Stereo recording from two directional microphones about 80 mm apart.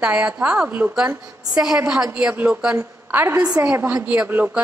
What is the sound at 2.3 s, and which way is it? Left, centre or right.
A woman's voice, right.